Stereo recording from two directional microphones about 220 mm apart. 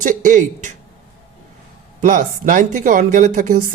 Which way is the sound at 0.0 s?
35° right (ahead or behind).